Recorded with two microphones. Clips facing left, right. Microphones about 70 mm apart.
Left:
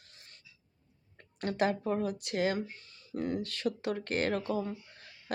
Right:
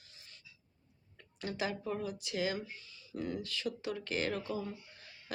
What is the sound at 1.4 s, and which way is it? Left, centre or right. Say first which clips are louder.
Speech: left 7 dB; left.